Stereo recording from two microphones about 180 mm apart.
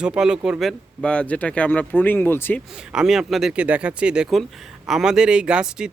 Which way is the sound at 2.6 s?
5° right (ahead or behind).